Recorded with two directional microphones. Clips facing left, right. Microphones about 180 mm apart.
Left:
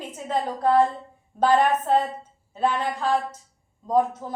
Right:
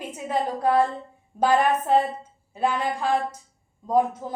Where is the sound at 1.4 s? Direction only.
10° right (ahead or behind).